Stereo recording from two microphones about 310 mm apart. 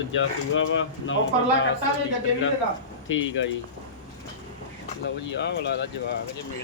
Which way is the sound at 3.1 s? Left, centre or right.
Left.